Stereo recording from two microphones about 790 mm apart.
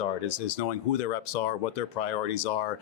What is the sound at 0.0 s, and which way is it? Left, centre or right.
Speech, left.